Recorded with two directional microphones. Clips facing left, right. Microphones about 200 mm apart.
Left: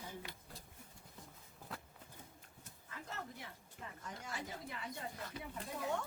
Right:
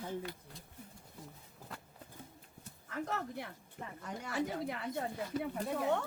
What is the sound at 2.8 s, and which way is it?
Speech, 70° right (ahead or behind).